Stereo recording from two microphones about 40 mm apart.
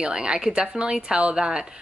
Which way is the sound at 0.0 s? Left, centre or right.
Right.